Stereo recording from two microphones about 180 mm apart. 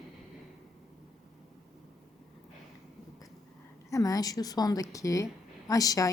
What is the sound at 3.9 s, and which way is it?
Speech, 20° left (ahead or behind).